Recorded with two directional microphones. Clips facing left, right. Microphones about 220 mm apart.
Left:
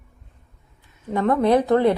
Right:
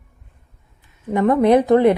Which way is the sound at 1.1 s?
15° right (ahead or behind).